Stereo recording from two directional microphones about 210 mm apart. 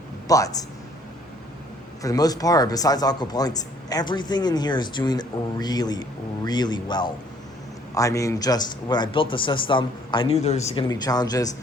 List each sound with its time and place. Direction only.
0.3 s a man's voice: 15° left (ahead or behind)
2.0 s speech: 15° left (ahead or behind)
10.8 s speech: 20° left (ahead or behind)